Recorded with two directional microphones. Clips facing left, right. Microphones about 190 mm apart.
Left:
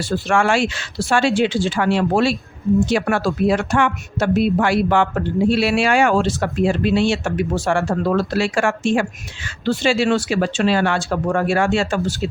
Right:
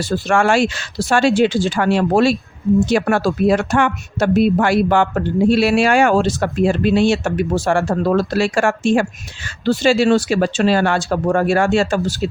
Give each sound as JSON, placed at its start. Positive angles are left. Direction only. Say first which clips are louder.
{"t": 0.0, "sound": "speech", "louder": "right 2 dB", "side_deg": -40}